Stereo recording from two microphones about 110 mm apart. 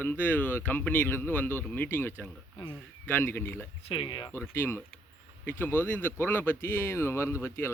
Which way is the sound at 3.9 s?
50° left (ahead or behind).